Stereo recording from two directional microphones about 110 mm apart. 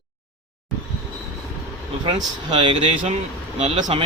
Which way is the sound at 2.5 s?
50° right (ahead or behind).